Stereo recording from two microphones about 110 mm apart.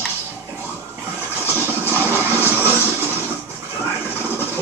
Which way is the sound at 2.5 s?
20° right (ahead or behind).